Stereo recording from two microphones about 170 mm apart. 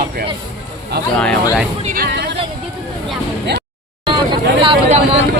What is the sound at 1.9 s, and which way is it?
Music, 70° right (ahead or behind).